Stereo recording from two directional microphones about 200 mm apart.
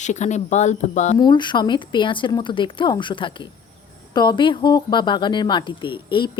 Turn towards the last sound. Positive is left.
turn(degrees=25)  # may be behind; listen again after turning